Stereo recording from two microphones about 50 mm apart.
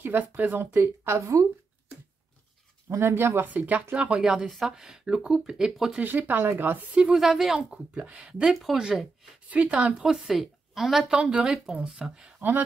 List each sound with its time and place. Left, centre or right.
0.0 s speech: right
1.0 s speech: right
2.9 s speech: right
3.4 s speech: right
4.2 s speech: centre
5.9 s speech: right
7.2 s speech: centre
7.7 s speech: right
9.5 s speech: right
9.9 s a woman's voice: centre
11.1 s speech: centre
12.4 s speech: right